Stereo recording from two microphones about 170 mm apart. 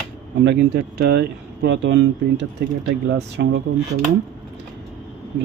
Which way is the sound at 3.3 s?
70° right (ahead or behind).